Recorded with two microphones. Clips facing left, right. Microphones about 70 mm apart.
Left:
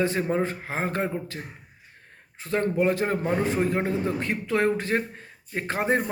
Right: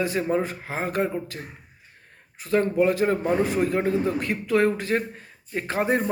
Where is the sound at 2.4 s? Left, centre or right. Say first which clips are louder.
Right 3 dB; left.